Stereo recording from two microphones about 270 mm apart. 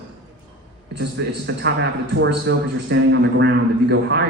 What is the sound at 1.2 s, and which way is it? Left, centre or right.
A man's voice, right.